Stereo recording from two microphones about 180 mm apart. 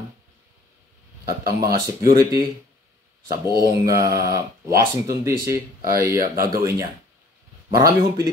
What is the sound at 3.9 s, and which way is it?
Speech, 20° right (ahead or behind).